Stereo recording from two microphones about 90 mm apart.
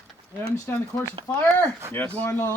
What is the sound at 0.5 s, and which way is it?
Speech, 35° left (ahead or behind).